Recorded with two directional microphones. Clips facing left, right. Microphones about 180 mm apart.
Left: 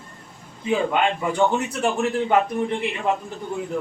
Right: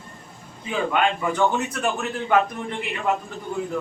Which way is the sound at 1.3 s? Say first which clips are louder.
Left 1 dB; 20° left (ahead or behind).